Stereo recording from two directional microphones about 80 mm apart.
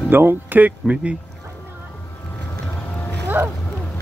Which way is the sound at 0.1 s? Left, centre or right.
Right.